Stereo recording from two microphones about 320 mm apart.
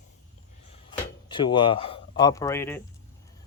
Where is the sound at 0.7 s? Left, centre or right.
Centre.